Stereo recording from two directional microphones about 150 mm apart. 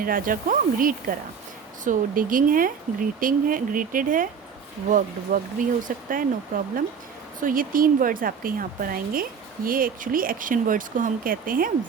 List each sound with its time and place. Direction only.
0.0 s speech: 70° right (ahead or behind)